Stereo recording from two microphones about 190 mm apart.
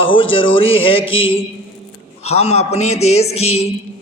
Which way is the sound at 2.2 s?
35° left (ahead or behind).